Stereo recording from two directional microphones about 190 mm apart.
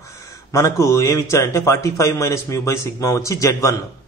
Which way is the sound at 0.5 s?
15° left (ahead or behind).